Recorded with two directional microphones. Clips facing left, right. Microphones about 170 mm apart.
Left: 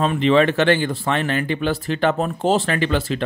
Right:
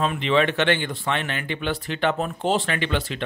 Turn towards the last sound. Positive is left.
turn(degrees=40)  # may be behind; listen again after turning